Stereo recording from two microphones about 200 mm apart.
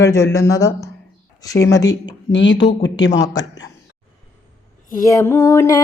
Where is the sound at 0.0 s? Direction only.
15° left (ahead or behind).